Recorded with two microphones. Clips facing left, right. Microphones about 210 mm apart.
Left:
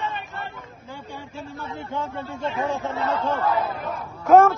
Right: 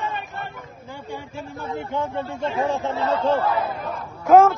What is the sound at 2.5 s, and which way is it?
Speech, 25° right (ahead or behind).